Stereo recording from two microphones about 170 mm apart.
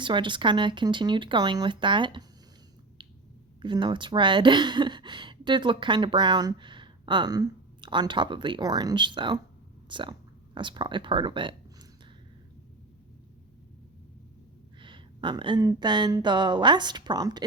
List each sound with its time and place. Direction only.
0.0 s speech: 30° right (ahead or behind)
3.6 s speech: 30° right (ahead or behind)
14.8 s speech: 30° right (ahead or behind)